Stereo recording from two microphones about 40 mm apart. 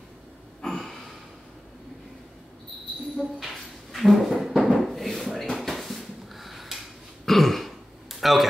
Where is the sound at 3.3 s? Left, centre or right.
Centre.